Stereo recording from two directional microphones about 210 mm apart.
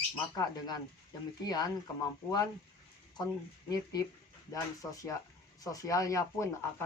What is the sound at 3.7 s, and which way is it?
Speech, 15° left (ahead or behind).